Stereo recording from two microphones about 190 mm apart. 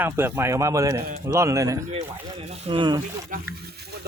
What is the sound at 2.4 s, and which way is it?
Speech, 35° right (ahead or behind).